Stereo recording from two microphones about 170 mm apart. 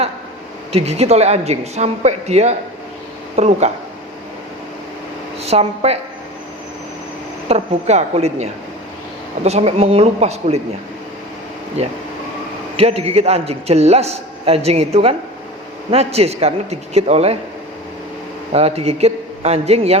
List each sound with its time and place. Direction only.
0.7 s a man's voice: 40° right (ahead or behind)
5.4 s a woman's voice: 40° right (ahead or behind)
7.4 s a man's voice: 40° right (ahead or behind)
11.8 s a man's voice: 40° right (ahead or behind)
18.5 s a man's voice: 35° right (ahead or behind)